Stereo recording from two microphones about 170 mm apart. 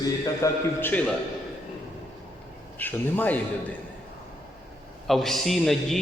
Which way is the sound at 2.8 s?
10° left (ahead or behind).